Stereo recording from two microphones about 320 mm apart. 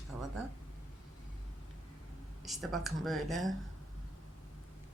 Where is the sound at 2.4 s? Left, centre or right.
Centre.